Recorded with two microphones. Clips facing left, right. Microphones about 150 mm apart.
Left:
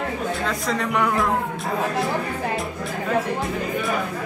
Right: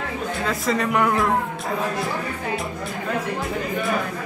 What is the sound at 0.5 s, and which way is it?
Speech, centre (ahead or behind).